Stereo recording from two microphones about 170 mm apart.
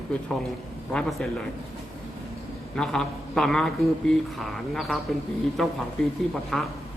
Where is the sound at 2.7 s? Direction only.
5° left (ahead or behind).